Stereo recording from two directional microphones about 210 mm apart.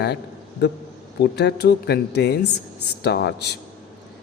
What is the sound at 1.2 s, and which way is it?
Speech, 50° left (ahead or behind).